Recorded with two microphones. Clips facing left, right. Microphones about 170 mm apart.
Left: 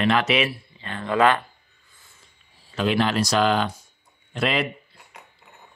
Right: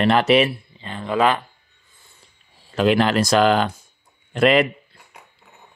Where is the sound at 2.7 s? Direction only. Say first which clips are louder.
Right 5 dB; 50° right (ahead or behind).